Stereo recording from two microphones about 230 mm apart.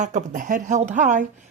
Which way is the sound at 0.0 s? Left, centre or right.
Right.